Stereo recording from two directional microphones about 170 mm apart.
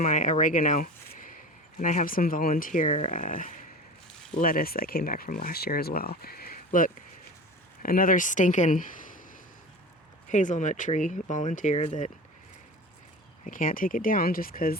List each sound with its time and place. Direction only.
0.0 s speech: 50° left (ahead or behind)
10.2 s speech: 45° left (ahead or behind)
13.4 s speech: 55° left (ahead or behind)